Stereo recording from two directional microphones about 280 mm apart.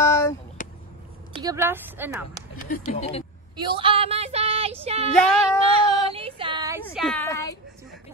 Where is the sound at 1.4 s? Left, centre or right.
Centre.